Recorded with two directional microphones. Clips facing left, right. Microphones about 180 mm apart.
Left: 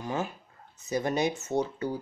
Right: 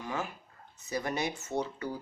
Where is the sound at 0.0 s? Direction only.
25° left (ahead or behind).